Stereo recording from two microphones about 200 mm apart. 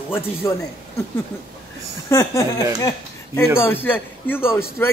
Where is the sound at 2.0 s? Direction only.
15° left (ahead or behind).